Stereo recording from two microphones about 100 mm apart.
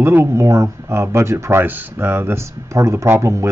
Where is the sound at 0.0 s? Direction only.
25° right (ahead or behind).